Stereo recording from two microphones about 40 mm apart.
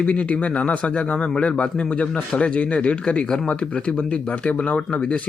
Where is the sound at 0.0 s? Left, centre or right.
Left.